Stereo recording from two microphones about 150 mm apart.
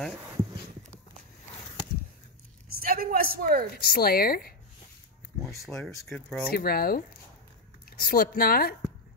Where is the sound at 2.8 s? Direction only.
75° right (ahead or behind).